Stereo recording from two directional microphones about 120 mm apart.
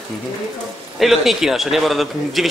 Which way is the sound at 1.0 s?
Centre (ahead or behind).